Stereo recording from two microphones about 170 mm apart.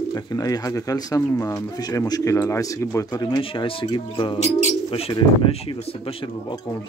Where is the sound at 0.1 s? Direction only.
20° left (ahead or behind).